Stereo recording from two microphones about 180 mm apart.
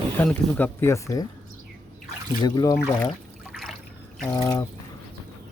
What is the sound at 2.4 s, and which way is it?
Speech, 20° left (ahead or behind).